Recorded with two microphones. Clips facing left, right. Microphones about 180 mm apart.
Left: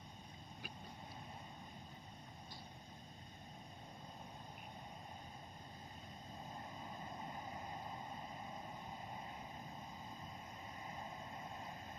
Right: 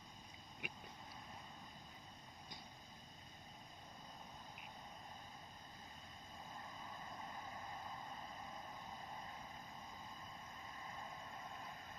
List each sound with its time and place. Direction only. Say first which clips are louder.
0.6 s boat: right 3 dB; 20° right (ahead or behind)
6.9 s vehicle: left 3 dB; 25° left (ahead or behind)